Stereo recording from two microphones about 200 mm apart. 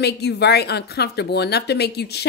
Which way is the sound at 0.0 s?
55° left (ahead or behind).